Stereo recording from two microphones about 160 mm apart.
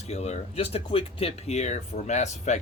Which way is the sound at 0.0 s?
45° left (ahead or behind).